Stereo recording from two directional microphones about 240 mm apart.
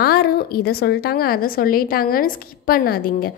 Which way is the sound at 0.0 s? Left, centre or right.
Left.